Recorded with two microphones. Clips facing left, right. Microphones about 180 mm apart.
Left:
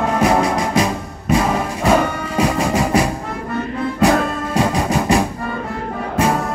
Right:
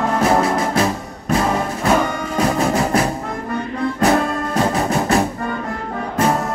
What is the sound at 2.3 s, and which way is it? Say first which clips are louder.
Music: even; 10° left (ahead or behind).